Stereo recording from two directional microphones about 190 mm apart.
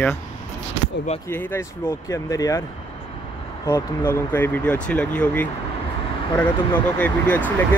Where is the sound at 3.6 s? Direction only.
15° left (ahead or behind).